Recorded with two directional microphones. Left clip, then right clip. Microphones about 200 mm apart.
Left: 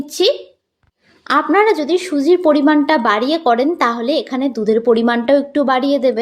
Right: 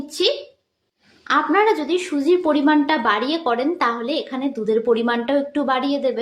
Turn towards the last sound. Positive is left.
turn(degrees=35)  # may be behind; listen again after turning